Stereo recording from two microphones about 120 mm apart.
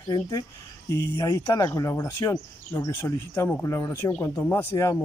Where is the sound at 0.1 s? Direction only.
25° left (ahead or behind).